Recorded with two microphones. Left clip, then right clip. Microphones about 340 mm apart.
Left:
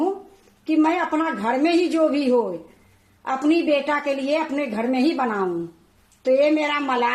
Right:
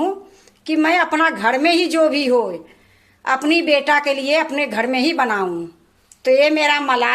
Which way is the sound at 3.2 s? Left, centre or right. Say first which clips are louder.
Right 4 dB; right.